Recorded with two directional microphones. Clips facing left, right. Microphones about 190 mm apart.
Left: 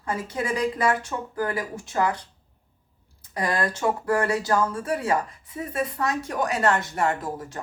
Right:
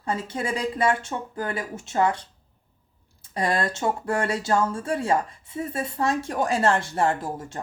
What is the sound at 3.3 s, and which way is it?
A woman's voice, 25° right (ahead or behind).